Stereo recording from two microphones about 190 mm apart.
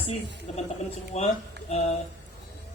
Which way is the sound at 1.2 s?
35° left (ahead or behind).